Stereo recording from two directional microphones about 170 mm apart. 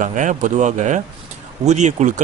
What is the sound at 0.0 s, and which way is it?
Speech, 45° right (ahead or behind).